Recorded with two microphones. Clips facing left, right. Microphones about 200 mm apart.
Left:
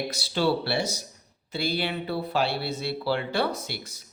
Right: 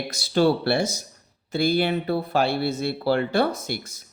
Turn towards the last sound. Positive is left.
turn(degrees=-45)  # may be behind; listen again after turning